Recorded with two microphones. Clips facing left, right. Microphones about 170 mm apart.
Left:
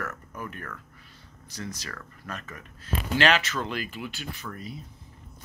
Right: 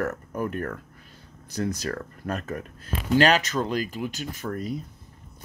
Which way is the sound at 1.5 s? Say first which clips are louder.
Right 10 dB; 55° right (ahead or behind).